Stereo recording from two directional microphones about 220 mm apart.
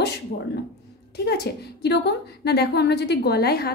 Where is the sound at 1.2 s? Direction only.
45° left (ahead or behind).